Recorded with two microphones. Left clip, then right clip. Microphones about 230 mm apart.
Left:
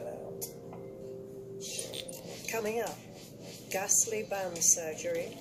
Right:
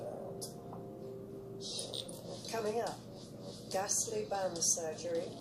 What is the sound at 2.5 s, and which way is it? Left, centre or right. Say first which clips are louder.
A woman's voice: left 2 dB; left.